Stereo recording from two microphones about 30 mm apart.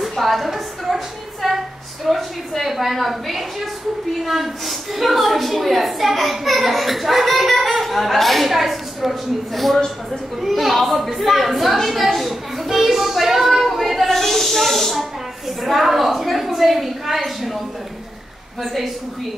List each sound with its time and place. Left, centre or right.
0.2 s a woman's voice: centre
2.0 s a woman's voice: centre
8.5 s a woman's voice: centre
13.1 s a sound: centre
14.0 s snake: centre
15.6 s a woman's voice: centre
18.6 s a woman's voice: centre